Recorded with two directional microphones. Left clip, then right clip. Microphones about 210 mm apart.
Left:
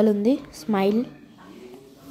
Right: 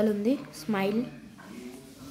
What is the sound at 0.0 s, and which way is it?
A woman's voice, 20° left (ahead or behind).